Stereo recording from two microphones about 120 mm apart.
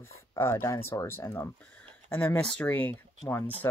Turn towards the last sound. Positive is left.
turn(degrees=20)  # may be behind; listen again after turning